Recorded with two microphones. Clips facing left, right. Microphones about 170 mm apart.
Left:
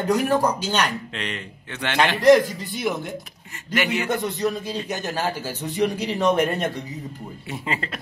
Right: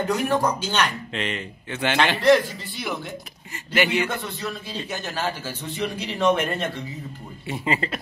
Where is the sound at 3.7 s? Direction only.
Centre (ahead or behind).